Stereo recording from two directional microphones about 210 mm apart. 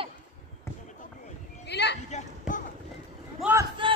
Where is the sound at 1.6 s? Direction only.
55° left (ahead or behind).